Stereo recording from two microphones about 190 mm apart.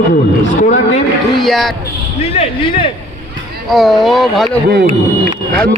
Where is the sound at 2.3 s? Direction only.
30° left (ahead or behind).